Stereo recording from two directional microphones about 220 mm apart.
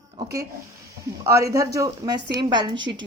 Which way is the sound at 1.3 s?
15° right (ahead or behind).